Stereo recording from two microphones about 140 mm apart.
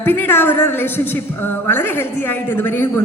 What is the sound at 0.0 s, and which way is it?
A woman's voice, 15° left (ahead or behind).